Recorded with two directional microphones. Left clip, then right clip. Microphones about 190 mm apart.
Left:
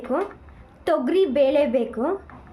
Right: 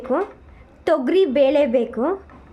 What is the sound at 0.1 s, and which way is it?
A woman's voice, 20° right (ahead or behind).